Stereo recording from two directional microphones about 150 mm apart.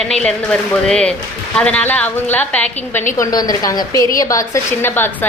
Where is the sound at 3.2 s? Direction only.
25° left (ahead or behind).